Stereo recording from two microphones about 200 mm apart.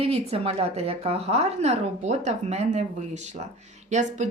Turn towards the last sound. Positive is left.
turn(degrees=-35)  # may be behind; listen again after turning